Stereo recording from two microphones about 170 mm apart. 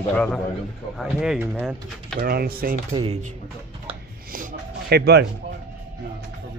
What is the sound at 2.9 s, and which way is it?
Speech, 35° right (ahead or behind).